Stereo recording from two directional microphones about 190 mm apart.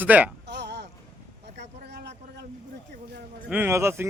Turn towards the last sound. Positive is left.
turn(degrees=-15)  # may be behind; listen again after turning